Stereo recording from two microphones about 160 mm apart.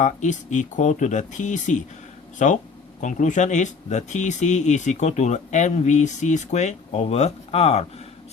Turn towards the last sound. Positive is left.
turn(degrees=40)  # may be behind; listen again after turning